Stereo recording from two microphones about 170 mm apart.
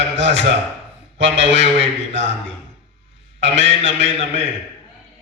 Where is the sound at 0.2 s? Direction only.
90° right.